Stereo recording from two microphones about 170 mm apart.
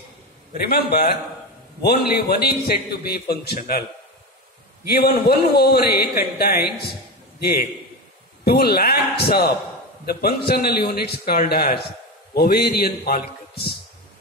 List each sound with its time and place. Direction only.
0.7 s a man's voice: 65° left (ahead or behind)
4.8 s a man's voice: 65° left (ahead or behind)
8.5 s a man's voice: 65° left (ahead or behind)